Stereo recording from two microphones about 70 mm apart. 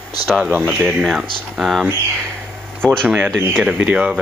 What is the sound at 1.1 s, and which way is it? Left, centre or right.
Speech, centre.